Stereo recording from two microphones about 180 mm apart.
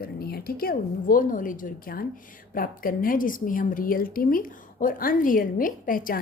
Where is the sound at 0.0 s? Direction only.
60° left (ahead or behind).